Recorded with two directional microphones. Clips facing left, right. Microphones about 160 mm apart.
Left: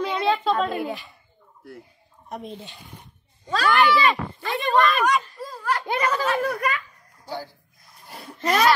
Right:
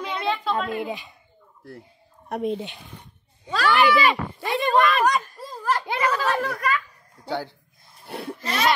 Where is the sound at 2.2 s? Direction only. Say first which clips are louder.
Right 9 dB; 60° right (ahead or behind).